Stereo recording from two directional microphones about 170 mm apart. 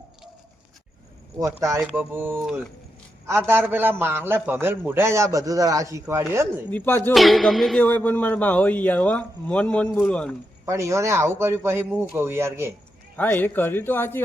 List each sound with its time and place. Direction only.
1.4 s a man's voice: 15° right (ahead or behind)
6.7 s a man's voice: 10° left (ahead or behind)
7.1 s a man's voice: centre (ahead or behind)
10.7 s a man's voice: 15° right (ahead or behind)
13.1 s a man's voice: 10° left (ahead or behind)